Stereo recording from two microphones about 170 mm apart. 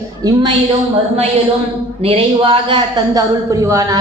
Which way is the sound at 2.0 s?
35° right (ahead or behind).